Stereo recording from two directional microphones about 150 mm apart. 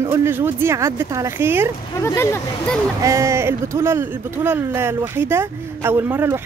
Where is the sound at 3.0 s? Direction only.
20° right (ahead or behind).